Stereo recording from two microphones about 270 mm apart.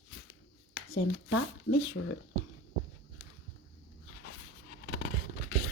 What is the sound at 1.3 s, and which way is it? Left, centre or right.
Speech, left.